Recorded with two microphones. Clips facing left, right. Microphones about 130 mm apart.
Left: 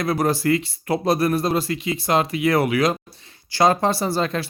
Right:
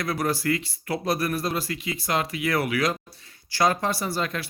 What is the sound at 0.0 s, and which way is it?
Speech, 25° left (ahead or behind).